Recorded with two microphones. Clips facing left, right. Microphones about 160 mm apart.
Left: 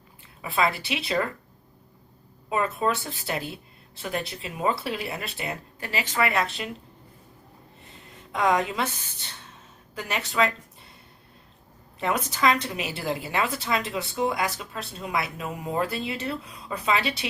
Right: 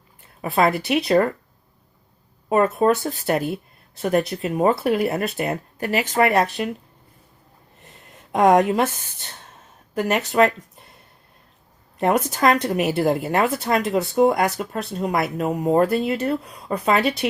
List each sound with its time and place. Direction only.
0.4 s a woman's voice: 45° right (ahead or behind)
2.5 s a woman's voice: 45° right (ahead or behind)
8.3 s a woman's voice: 50° right (ahead or behind)
11.9 s a woman's voice: 50° right (ahead or behind)